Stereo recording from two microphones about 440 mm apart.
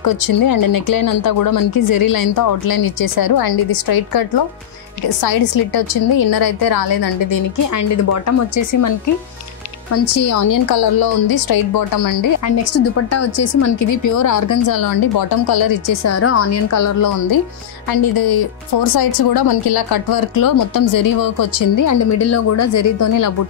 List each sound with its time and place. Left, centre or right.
0.0 s a woman's voice: left
5.2 s a woman's voice: left
7.9 s a woman's voice: left
10.7 s a woman's voice: left
15.9 s a woman's voice: left